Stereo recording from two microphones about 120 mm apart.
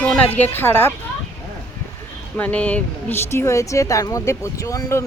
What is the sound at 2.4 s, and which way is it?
Speech, 10° left (ahead or behind).